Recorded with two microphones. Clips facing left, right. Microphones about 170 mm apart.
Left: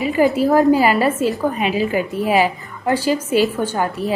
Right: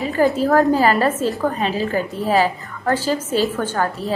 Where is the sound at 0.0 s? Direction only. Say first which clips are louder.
Left 2 dB; 15° left (ahead or behind).